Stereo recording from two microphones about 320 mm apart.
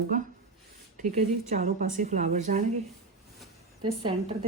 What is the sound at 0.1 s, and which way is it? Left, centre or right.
A woman's voice, right.